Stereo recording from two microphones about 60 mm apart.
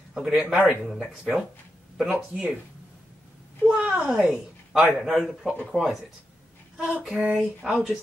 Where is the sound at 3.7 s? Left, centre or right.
Centre.